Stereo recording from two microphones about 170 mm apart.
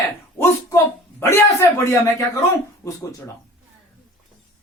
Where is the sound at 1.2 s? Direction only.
20° left (ahead or behind).